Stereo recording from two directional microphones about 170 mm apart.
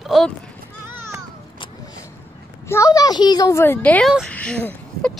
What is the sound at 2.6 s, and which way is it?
Speech, 15° left (ahead or behind).